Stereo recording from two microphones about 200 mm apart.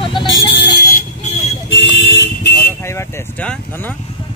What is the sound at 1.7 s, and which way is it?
Car alarm, 65° left (ahead or behind).